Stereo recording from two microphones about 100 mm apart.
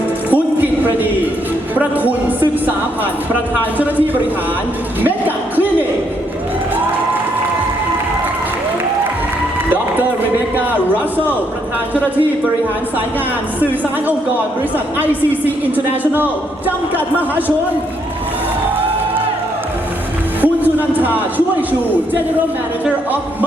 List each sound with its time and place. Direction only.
0.6 s a sound: 20° right (ahead or behind)
1.8 s a woman's voice: 15° right (ahead or behind)
3.8 s a woman's voice: 15° right (ahead or behind)
5.0 s music: 20° right (ahead or behind)
14.9 s a woman's voice: 15° right (ahead or behind)
20.4 s a sound: 15° right (ahead or behind)